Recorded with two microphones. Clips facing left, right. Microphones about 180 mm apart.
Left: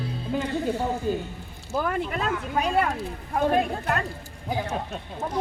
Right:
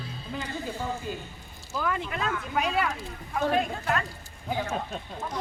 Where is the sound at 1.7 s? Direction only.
50° left (ahead or behind).